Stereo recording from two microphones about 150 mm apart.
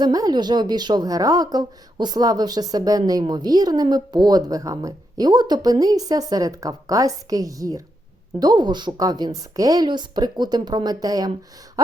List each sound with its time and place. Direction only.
0.0 s speech: 25° right (ahead or behind)